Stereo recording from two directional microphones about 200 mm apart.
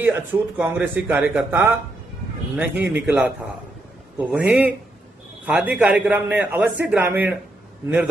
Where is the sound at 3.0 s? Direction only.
5° right (ahead or behind).